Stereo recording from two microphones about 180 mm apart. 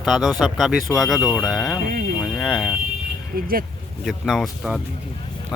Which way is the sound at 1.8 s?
55° right (ahead or behind).